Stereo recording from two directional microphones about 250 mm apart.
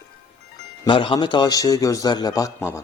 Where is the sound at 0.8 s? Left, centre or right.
Centre.